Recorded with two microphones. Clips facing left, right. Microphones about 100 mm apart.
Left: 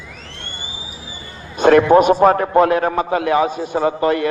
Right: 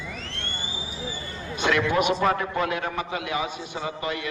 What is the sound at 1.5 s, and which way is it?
A man's voice, 45° left (ahead or behind).